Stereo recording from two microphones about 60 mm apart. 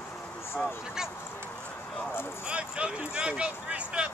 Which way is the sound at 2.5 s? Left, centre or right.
Centre.